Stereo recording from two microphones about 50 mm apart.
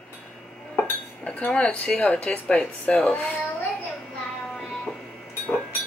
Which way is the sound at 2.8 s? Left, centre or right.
Left.